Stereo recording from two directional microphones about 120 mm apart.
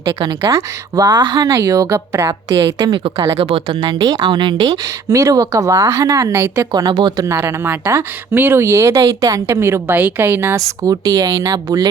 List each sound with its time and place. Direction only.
0.4 s speech: 25° right (ahead or behind)
2.6 s speech: 35° right (ahead or behind)
3.9 s speech: 30° right (ahead or behind)
6.7 s speech: 35° right (ahead or behind)
7.3 s speech: 25° right (ahead or behind)